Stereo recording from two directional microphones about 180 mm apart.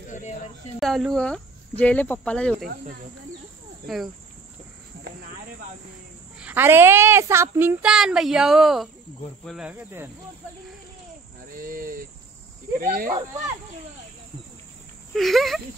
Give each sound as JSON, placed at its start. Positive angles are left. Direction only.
{"t": 0.7, "sound": "speech", "side_deg": 0}
{"t": 3.8, "sound": "speech", "side_deg": 0}
{"t": 6.4, "sound": "a woman's voice", "side_deg": -10}
{"t": 11.5, "sound": "cricket", "side_deg": -50}
{"t": 12.8, "sound": "speech", "side_deg": -50}
{"t": 15.1, "sound": "speech", "side_deg": 0}